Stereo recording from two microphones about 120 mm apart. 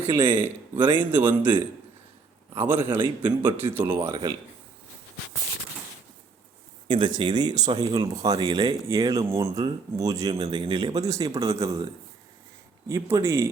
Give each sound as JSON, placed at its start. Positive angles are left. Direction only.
{"t": 0.3, "sound": "speech", "side_deg": -15}
{"t": 3.0, "sound": "speech", "side_deg": -40}
{"t": 3.8, "sound": "speech", "side_deg": -15}
{"t": 4.1, "sound": "speech", "side_deg": -35}
{"t": 6.8, "sound": "speech", "side_deg": -40}
{"t": 10.5, "sound": "speech", "side_deg": -40}
{"t": 12.9, "sound": "speech", "side_deg": -25}